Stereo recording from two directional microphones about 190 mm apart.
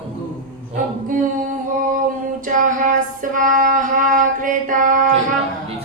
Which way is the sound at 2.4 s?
45° right (ahead or behind).